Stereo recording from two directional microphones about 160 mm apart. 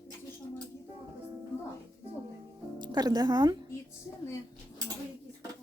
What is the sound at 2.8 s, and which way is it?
Speech, 25° right (ahead or behind).